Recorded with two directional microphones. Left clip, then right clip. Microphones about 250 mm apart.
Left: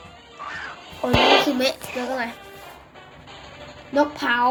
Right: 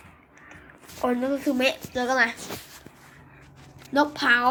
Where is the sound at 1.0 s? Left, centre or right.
Centre.